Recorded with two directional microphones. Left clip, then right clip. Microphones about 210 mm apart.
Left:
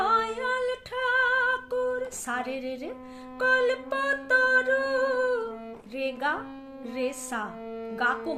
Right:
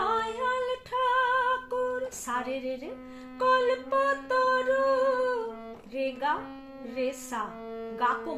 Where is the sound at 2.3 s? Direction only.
55° left (ahead or behind).